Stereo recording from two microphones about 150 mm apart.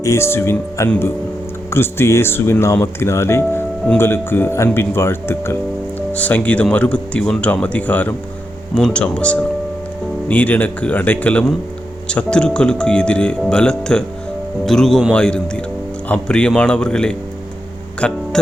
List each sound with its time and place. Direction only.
0.0 s speech: 20° left (ahead or behind)